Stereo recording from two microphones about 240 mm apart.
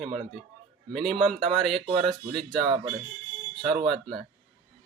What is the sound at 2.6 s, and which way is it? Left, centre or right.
Speech, centre.